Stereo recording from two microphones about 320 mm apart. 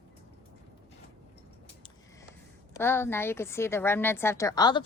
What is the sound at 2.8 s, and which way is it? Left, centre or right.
A woman's voice, centre.